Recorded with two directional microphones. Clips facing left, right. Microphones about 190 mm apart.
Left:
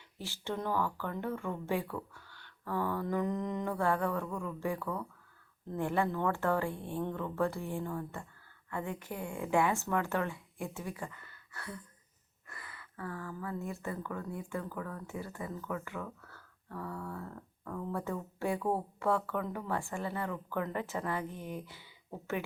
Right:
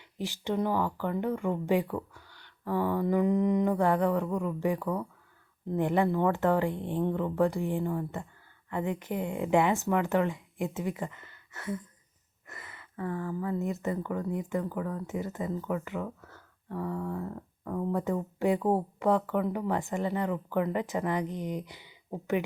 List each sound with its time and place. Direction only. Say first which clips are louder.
0.2 s a woman's voice: right 7 dB; 15° right (ahead or behind)